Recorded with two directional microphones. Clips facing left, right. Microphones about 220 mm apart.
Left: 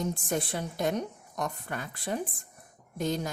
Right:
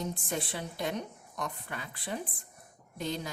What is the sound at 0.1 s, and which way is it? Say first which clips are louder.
A woman's voice: left 4 dB; 45° left (ahead or behind).